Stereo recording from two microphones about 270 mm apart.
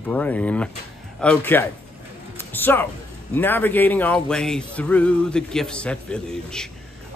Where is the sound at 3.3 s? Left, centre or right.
Centre.